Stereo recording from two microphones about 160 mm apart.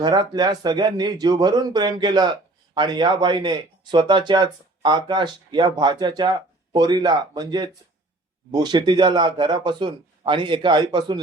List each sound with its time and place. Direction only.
0.0 s speech: 25° right (ahead or behind)